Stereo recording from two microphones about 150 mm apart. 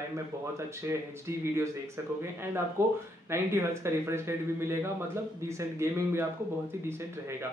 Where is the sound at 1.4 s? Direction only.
15° right (ahead or behind).